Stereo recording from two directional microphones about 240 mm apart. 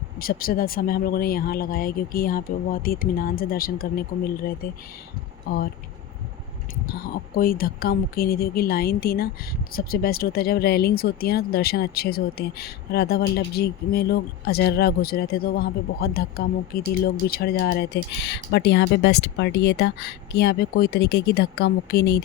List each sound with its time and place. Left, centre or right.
0.2 s speech: left
7.3 s speech: left